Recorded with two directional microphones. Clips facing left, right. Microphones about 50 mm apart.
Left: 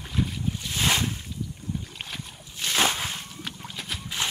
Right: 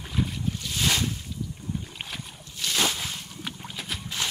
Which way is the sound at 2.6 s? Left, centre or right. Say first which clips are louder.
Left 2 dB; left.